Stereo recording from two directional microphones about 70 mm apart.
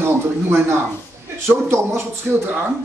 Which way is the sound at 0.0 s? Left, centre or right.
Right.